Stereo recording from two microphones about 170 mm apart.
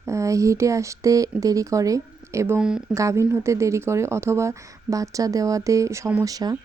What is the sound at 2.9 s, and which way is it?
Speech, 15° right (ahead or behind).